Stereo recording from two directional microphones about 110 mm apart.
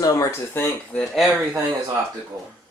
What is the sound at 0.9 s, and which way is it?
Speech, centre (ahead or behind).